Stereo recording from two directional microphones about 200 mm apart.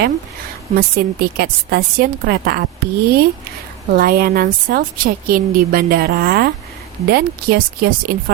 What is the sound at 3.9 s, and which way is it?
Speech, 50° right (ahead or behind).